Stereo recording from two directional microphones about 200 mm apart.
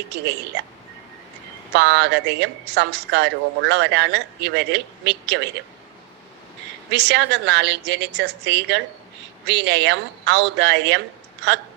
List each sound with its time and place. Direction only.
0.1 s a woman's voice: 60° right (ahead or behind)
1.7 s a woman's voice: 60° right (ahead or behind)
6.9 s a woman's voice: 60° right (ahead or behind)